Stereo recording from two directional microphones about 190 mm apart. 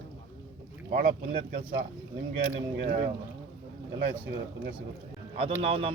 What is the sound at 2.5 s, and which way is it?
Speech, 35° right (ahead or behind).